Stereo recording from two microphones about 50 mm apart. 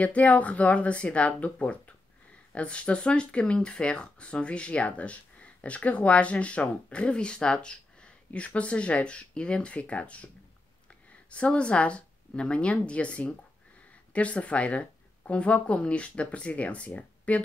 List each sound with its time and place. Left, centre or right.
0.0 s speech: left